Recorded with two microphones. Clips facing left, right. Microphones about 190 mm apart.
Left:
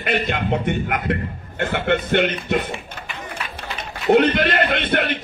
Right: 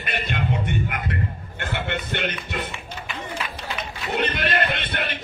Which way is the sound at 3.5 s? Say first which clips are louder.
Even; 55° left (ahead or behind).